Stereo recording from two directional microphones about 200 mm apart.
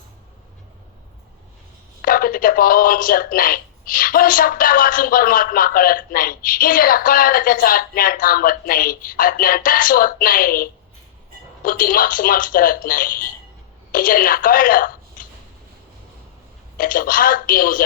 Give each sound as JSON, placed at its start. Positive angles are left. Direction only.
{"t": 2.0, "sound": "a woman's voice", "side_deg": 45}
{"t": 16.7, "sound": "a woman's voice", "side_deg": 45}